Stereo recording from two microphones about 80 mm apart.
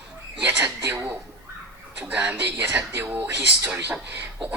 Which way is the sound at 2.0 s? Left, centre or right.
Centre.